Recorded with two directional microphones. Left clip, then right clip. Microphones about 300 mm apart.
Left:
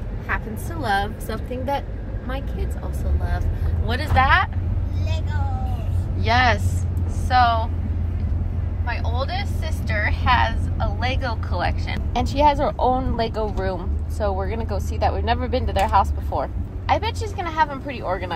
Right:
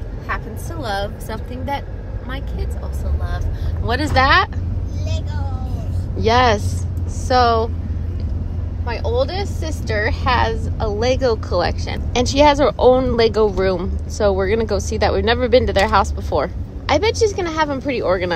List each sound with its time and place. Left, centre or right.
3.8 s a woman's voice: right
6.2 s a woman's voice: right
8.8 s a woman's voice: right